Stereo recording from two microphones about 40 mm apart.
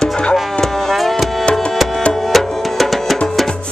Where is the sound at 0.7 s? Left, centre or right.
Centre.